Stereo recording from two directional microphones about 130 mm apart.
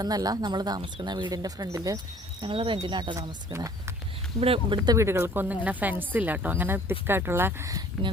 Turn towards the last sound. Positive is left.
turn(degrees=-25)  # may be behind; listen again after turning